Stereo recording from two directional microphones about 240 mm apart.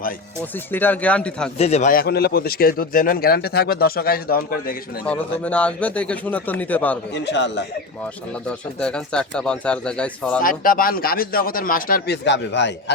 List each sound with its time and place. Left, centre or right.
0.7 s speech: centre
1.5 s a man's voice: left
5.0 s speech: centre
7.1 s a man's voice: left
8.4 s speech: centre
10.4 s a man's voice: left